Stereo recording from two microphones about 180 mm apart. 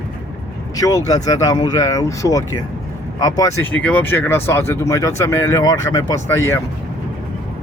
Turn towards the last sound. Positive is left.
turn(degrees=20)  # may be behind; listen again after turning